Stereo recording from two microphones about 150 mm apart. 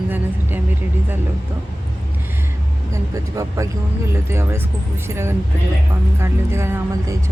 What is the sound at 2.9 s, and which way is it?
Speech, 20° right (ahead or behind).